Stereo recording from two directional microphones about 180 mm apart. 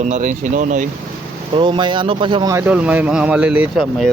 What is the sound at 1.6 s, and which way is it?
Speech, 25° right (ahead or behind).